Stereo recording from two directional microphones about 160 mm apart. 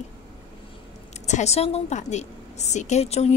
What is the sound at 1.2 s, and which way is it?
A woman's voice, 45° left (ahead or behind).